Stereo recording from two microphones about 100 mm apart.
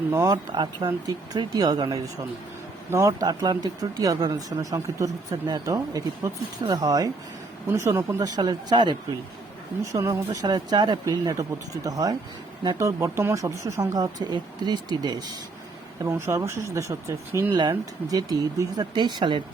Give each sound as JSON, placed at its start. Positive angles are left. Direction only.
{"t": 0.1, "sound": "speech", "side_deg": -30}
{"t": 0.5, "sound": "speech", "side_deg": -50}
{"t": 7.7, "sound": "speech", "side_deg": -30}
{"t": 8.4, "sound": "speech", "side_deg": -45}
{"t": 9.8, "sound": "speech", "side_deg": -30}
{"t": 11.0, "sound": "speech", "side_deg": -35}
{"t": 16.0, "sound": "speech", "side_deg": -25}
{"t": 17.6, "sound": "speech", "side_deg": -40}